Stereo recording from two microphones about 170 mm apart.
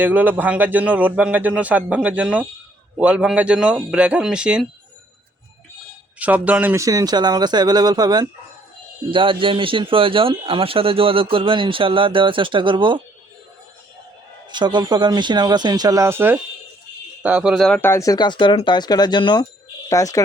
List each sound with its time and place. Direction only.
0.0 s a man's voice: 10° right (ahead or behind)
6.1 s a man's voice: 10° right (ahead or behind); by 13.0 s 30° right (ahead or behind)
14.5 s speech: 25° right (ahead or behind); by 20.2 s 20° left (ahead or behind)